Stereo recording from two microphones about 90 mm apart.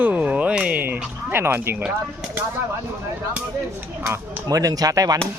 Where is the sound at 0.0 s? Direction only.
15° right (ahead or behind).